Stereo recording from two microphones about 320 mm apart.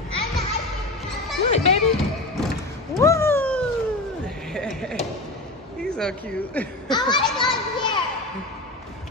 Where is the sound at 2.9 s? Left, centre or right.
Centre.